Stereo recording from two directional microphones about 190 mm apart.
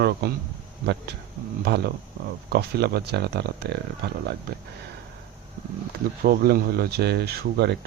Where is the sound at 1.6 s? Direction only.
55° right (ahead or behind).